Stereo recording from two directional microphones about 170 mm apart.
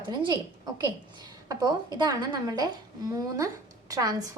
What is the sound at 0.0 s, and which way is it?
Speech, 25° right (ahead or behind).